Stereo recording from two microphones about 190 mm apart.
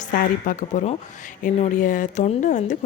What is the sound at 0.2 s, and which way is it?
A woman's voice, 40° left (ahead or behind).